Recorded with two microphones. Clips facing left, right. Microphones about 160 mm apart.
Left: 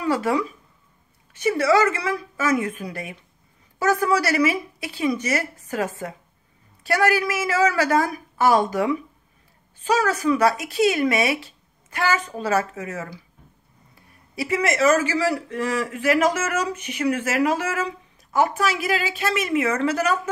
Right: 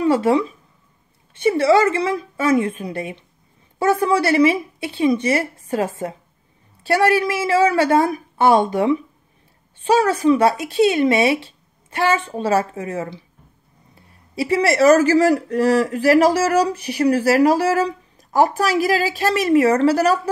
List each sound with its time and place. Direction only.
0.0 s speech: 25° right (ahead or behind)